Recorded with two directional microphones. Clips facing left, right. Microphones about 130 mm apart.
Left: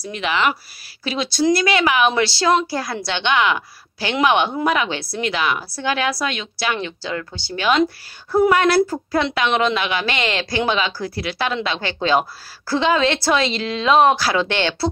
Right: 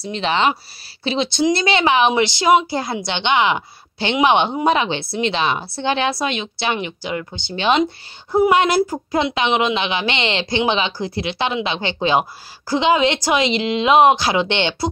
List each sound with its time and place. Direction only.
0.0 s a woman's voice: 30° right (ahead or behind)